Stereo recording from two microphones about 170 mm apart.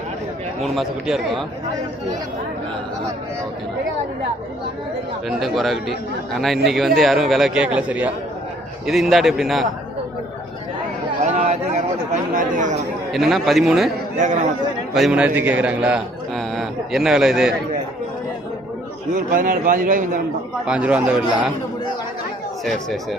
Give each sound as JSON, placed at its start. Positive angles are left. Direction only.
{"t": 0.6, "sound": "a man's voice", "side_deg": 0}
{"t": 5.4, "sound": "a man's voice", "side_deg": 0}
{"t": 11.2, "sound": "a sound", "side_deg": -40}
{"t": 12.3, "sound": "a man's voice", "side_deg": -50}
{"t": 13.1, "sound": "a man's voice", "side_deg": 0}
{"t": 14.2, "sound": "a man's voice", "side_deg": -45}
{"t": 14.9, "sound": "a man's voice", "side_deg": -5}
{"t": 19.1, "sound": "a man's voice", "side_deg": -55}
{"t": 20.7, "sound": "speech", "side_deg": -5}
{"t": 22.6, "sound": "a man's voice", "side_deg": 0}